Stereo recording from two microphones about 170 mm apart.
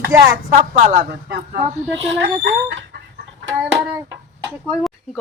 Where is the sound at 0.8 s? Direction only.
45° right (ahead or behind).